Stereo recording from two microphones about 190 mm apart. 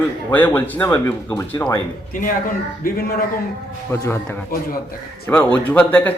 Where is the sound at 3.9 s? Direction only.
15° left (ahead or behind).